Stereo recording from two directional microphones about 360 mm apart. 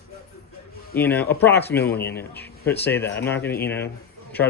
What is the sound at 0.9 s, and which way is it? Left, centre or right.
Speech, centre.